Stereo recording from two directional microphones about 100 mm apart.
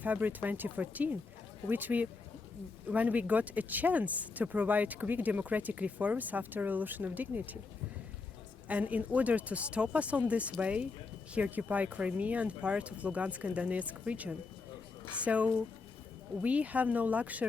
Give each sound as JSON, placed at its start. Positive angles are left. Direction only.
{"t": 0.0, "sound": "speech", "side_deg": -15}
{"t": 8.6, "sound": "speech", "side_deg": -15}